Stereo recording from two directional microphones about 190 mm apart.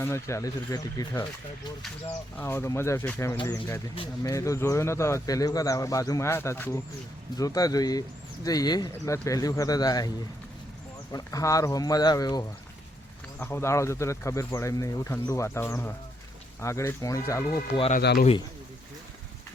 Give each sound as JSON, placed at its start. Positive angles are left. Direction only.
{"t": 0.0, "sound": "speech", "side_deg": 15}
{"t": 2.4, "sound": "speech", "side_deg": 15}
{"t": 11.1, "sound": "speech", "side_deg": 20}
{"t": 18.0, "sound": "speech", "side_deg": 55}